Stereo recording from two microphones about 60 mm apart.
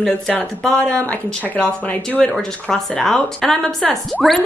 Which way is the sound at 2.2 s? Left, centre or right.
Centre.